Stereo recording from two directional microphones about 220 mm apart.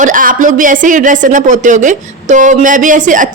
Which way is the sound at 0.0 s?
35° right (ahead or behind).